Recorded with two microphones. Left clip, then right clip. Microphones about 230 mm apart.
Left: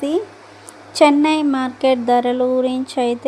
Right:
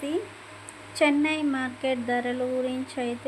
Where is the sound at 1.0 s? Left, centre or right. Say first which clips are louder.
Left 10 dB; left.